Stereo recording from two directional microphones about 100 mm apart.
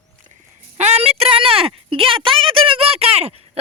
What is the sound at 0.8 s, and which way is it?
Speech, 85° right.